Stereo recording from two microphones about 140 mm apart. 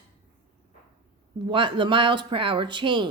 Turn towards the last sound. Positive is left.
turn(degrees=-35)  # may be behind; listen again after turning